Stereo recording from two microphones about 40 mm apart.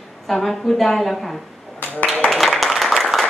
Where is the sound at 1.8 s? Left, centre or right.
Left.